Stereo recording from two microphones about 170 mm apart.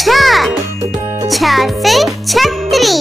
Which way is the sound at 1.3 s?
Centre (ahead or behind).